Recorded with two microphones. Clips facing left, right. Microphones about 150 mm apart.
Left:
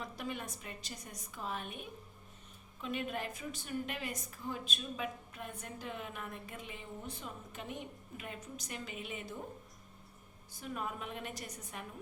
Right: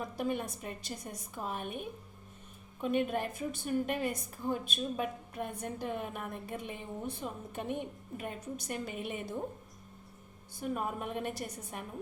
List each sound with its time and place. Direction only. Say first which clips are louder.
0.0 s a woman's voice: right 7 dB; 50° right (ahead or behind)
10.6 s a woman's voice: right 6 dB; 45° right (ahead or behind)